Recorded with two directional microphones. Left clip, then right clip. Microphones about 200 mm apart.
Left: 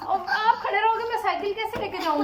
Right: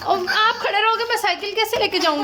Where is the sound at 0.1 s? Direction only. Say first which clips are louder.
Right 4 dB; 50° right (ahead or behind).